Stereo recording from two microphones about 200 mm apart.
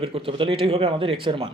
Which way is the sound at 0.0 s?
25° right (ahead or behind).